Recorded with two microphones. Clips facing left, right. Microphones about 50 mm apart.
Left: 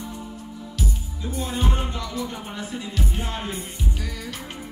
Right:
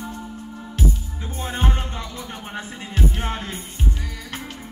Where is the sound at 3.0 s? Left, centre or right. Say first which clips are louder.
Right 7 dB; right.